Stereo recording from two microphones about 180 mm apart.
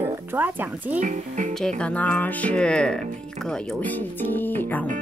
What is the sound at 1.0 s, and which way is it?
Speech, 45° right (ahead or behind).